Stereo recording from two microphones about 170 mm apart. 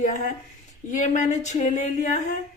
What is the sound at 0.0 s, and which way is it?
A woman's voice, 45° left (ahead or behind).